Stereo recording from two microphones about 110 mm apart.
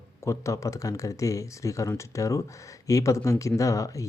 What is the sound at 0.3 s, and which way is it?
Speech, 30° left (ahead or behind).